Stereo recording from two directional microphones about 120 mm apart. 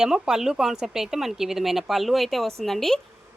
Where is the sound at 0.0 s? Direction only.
5° right (ahead or behind).